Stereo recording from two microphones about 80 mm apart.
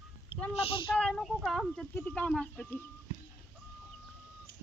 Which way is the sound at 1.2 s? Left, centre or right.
Centre.